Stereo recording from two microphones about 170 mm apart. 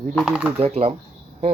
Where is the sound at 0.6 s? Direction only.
35° right (ahead or behind).